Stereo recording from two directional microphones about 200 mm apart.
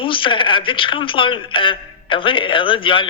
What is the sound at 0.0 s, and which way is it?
Speech, 25° left (ahead or behind).